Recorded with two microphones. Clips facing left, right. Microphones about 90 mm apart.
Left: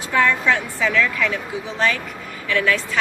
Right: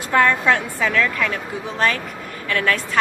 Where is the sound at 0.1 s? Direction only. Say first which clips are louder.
Right 2 dB; 45° right (ahead or behind).